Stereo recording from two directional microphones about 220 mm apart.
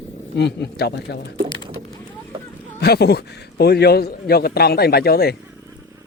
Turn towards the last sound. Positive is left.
turn(degrees=45)  # may be behind; listen again after turning